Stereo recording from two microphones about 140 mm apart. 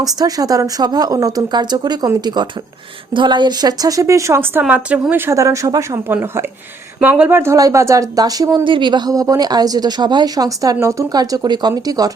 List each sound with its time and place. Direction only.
0.0 s speech: 25° right (ahead or behind)
4.6 s a woman's voice: 10° right (ahead or behind); by 6.1 s 25° right (ahead or behind)
7.0 s speech: 10° right (ahead or behind)